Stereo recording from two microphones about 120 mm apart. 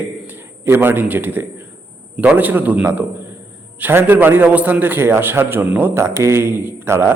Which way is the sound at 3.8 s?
15° right (ahead or behind).